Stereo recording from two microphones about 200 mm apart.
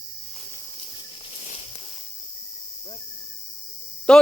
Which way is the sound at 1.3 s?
35° left (ahead or behind).